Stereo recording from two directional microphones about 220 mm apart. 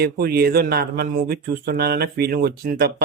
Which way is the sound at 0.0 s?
45° right (ahead or behind).